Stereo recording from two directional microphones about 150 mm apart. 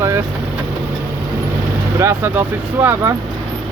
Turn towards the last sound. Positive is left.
turn(degrees=-15)  # may be behind; listen again after turning